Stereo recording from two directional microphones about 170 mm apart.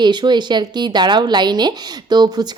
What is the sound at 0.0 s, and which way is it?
A woman's voice, 25° right (ahead or behind).